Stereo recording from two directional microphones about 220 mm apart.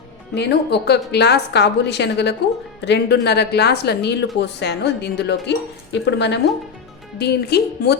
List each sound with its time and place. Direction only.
0.3 s a woman's voice: 50° left (ahead or behind)